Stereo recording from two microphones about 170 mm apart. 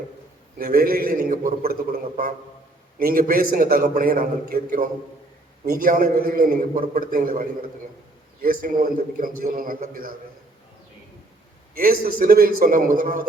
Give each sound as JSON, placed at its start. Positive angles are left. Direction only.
{"t": 0.6, "sound": "a man's voice", "side_deg": -60}
{"t": 3.0, "sound": "a man's voice", "side_deg": -60}
{"t": 11.8, "sound": "a man's voice", "side_deg": -60}